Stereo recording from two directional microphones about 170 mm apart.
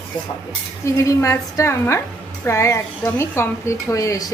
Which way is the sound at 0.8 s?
20° left (ahead or behind).